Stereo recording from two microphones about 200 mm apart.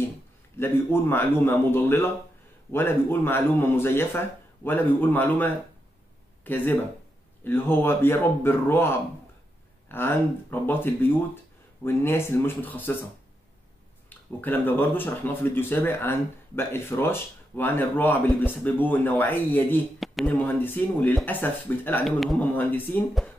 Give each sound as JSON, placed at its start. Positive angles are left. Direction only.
{"t": 0.6, "sound": "speech", "side_deg": 10}
{"t": 14.0, "sound": "speech", "side_deg": 10}